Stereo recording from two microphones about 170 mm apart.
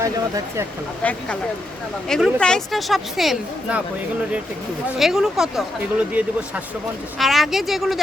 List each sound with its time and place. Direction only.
0.0 s speech: 20° right (ahead or behind)
1.0 s speech: 10° left (ahead or behind)
4.9 s speech: centre (ahead or behind)